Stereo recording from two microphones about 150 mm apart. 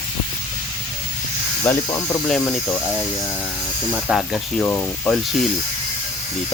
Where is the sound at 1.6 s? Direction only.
15° left (ahead or behind).